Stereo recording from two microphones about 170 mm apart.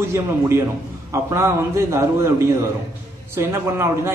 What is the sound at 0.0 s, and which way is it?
A man's voice, 15° right (ahead or behind).